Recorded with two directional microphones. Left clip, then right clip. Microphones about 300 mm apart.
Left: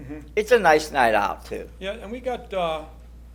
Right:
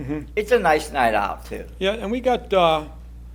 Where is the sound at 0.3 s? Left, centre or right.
Centre.